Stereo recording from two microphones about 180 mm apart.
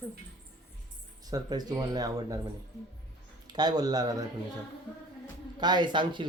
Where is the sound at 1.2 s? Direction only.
20° right (ahead or behind).